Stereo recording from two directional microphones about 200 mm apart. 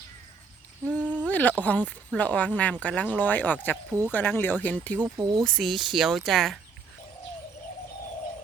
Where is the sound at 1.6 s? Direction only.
5° left (ahead or behind).